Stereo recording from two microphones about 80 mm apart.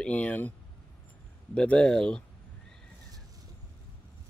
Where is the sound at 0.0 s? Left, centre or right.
Centre.